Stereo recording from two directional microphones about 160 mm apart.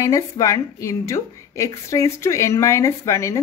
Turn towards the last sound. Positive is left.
turn(degrees=20)  # may be behind; listen again after turning